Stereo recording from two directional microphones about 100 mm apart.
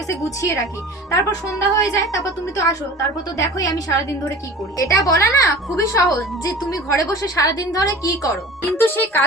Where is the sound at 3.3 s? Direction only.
35° left (ahead or behind).